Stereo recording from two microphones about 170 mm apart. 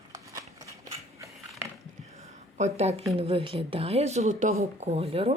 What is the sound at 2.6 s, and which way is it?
Speech, 40° right (ahead or behind).